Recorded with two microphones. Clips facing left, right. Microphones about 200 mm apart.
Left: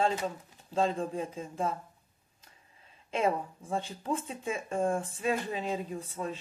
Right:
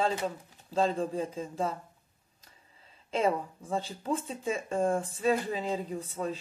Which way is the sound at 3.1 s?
35° right (ahead or behind).